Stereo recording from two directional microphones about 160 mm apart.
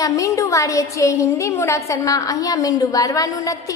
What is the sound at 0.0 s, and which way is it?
A woman's voice, 20° left (ahead or behind).